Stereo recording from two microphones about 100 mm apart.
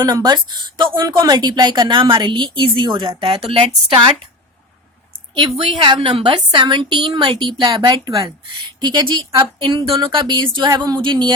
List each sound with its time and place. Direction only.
0.0 s a woman's voice: 45° right (ahead or behind)
3.2 s speech: 75° right (ahead or behind)
5.3 s a woman's voice: 65° right (ahead or behind)